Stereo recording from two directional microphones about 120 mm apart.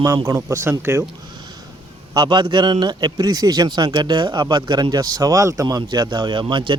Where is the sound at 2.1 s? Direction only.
35° right (ahead or behind).